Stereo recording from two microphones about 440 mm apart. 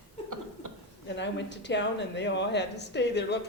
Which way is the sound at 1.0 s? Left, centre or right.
Left.